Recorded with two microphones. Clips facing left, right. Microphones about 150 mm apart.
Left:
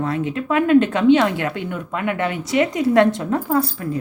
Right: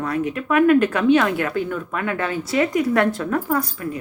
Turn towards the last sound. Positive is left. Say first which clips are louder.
# left 2 dB
turn(degrees=25)  # may be behind; listen again after turning